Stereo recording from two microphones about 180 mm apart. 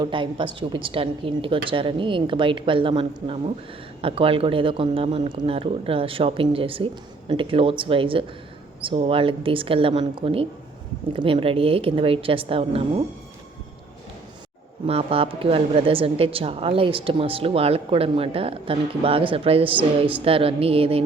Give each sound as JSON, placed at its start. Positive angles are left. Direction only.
{"t": 0.0, "sound": "a woman's voice", "side_deg": -30}
{"t": 14.8, "sound": "speech", "side_deg": -35}